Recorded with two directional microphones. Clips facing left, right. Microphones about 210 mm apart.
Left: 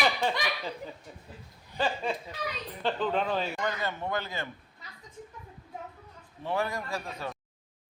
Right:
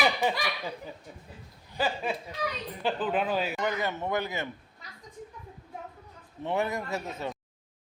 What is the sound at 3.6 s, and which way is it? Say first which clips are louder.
Speech: right 2 dB; 15° right (ahead or behind).